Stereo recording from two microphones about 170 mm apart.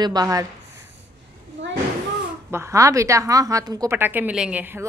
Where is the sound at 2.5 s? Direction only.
15° right (ahead or behind).